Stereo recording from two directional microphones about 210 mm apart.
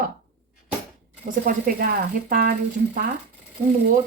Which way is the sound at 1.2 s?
45° right (ahead or behind).